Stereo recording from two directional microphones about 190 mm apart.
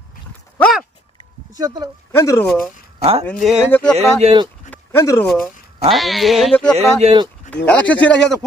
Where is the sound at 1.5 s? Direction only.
20° right (ahead or behind).